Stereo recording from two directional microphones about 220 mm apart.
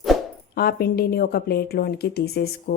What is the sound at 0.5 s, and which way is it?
Speech, 45° left (ahead or behind).